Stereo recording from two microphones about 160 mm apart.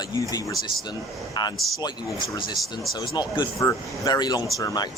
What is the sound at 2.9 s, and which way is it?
Speech, 25° left (ahead or behind).